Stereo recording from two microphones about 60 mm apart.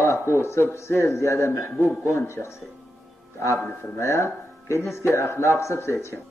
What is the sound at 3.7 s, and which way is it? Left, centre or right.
Speech, left.